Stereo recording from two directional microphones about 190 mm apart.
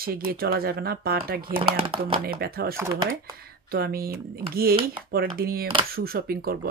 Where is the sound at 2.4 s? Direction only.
55° right (ahead or behind).